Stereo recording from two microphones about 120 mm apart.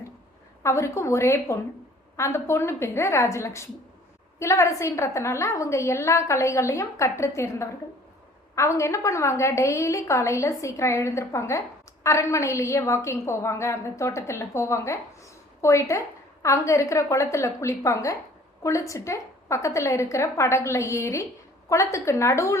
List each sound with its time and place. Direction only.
0.6 s a woman's voice: 25° left (ahead or behind)